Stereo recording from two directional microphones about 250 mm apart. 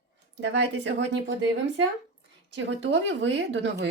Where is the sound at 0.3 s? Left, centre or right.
Right.